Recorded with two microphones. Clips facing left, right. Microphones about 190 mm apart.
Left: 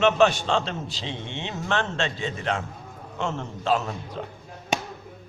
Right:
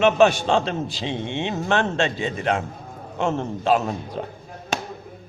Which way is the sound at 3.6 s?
15° right (ahead or behind).